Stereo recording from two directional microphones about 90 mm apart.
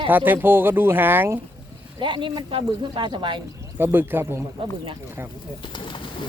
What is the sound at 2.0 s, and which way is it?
Speech, 65° right (ahead or behind).